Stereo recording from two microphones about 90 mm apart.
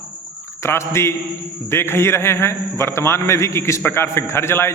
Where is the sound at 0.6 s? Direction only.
30° left (ahead or behind).